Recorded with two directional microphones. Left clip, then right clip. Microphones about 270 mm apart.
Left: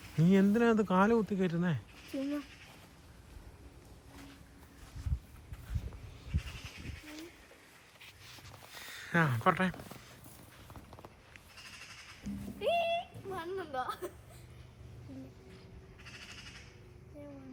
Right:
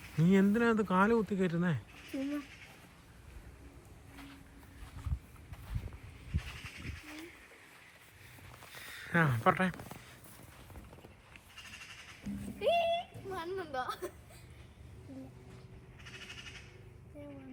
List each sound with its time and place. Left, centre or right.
0.2 s speech: centre
8.8 s a sound: centre
12.2 s music: centre